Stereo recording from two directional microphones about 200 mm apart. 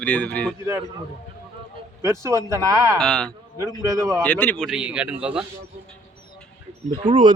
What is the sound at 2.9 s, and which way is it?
Speech, centre (ahead or behind).